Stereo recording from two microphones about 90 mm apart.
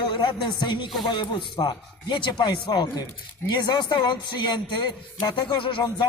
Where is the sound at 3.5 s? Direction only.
60° left (ahead or behind).